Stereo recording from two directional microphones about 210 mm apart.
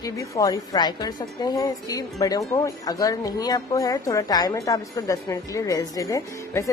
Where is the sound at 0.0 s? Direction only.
15° left (ahead or behind).